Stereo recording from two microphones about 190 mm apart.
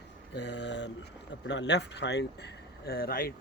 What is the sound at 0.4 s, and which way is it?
Speech, 70° left (ahead or behind).